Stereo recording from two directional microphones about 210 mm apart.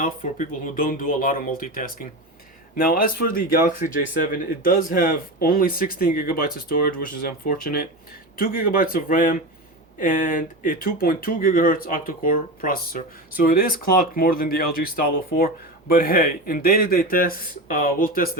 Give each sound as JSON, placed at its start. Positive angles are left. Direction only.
{"t": 0.0, "sound": "speech", "side_deg": 40}